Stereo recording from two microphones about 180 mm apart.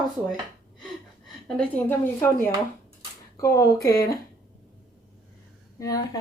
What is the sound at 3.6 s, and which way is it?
Speech, 20° left (ahead or behind).